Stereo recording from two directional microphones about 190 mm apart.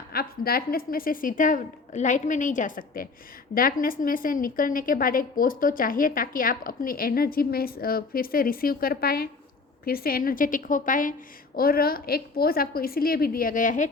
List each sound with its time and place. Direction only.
0.1 s a woman's voice: 50° left (ahead or behind)